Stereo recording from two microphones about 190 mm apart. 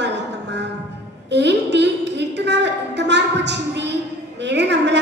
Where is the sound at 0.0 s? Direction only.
65° right (ahead or behind).